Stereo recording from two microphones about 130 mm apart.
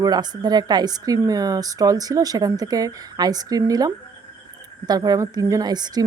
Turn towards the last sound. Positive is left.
turn(degrees=-30)  # may be behind; listen again after turning